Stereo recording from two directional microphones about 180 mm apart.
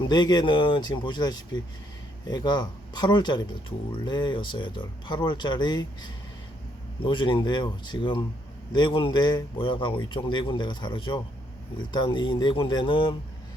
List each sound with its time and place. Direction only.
0.1 s speech: 25° left (ahead or behind)